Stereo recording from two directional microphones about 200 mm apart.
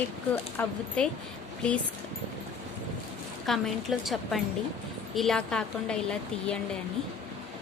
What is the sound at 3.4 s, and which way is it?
A woman's voice, centre (ahead or behind).